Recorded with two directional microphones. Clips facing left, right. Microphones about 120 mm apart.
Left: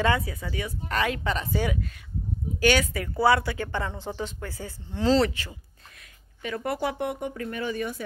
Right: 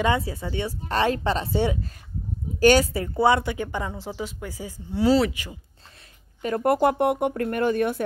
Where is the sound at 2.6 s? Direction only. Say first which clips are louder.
Right 6 dB; 40° right (ahead or behind).